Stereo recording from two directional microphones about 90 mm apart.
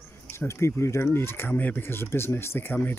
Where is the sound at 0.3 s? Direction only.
30° left (ahead or behind).